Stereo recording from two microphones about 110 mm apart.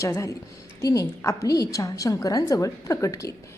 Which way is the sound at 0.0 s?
30° left (ahead or behind).